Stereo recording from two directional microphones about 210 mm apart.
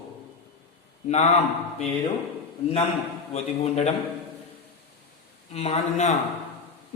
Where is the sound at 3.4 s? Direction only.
30° left (ahead or behind).